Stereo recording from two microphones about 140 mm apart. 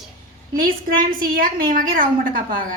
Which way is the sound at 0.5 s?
90° right.